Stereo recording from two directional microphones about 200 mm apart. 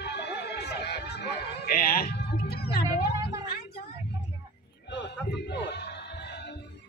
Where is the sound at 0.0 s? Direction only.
55° left (ahead or behind).